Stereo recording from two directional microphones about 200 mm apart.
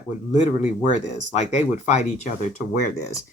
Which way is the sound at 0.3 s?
35° left (ahead or behind).